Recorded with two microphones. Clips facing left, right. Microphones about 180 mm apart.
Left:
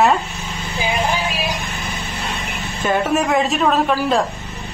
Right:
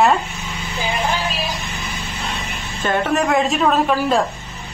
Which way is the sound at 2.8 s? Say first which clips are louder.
Left 1 dB; 10° left (ahead or behind).